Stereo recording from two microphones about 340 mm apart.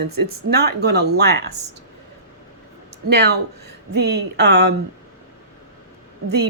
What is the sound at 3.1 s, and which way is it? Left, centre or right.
A woman's voice, right.